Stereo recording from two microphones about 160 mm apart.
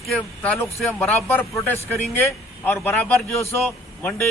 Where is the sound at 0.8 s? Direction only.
10° left (ahead or behind).